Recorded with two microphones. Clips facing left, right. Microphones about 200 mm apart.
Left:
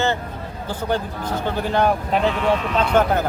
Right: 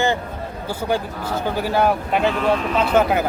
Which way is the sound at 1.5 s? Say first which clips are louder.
Right 1 dB; 10° right (ahead or behind).